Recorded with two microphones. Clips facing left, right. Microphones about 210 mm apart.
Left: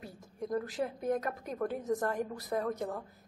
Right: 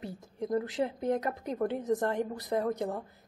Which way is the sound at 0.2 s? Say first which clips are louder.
Right 3 dB; 20° right (ahead or behind).